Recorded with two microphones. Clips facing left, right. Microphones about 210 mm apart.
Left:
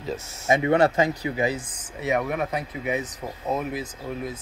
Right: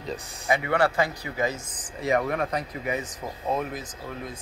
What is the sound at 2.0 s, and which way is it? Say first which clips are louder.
Speech: even; 5° left (ahead or behind).